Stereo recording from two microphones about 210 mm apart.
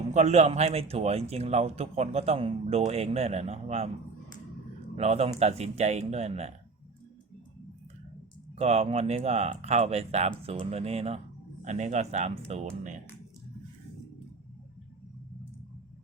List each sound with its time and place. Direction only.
0.1 s speech: 35° right (ahead or behind)
4.9 s speech: 30° right (ahead or behind)
8.5 s speech: 30° right (ahead or behind)